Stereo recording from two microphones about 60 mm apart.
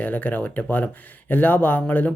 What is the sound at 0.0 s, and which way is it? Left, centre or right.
Speech, left.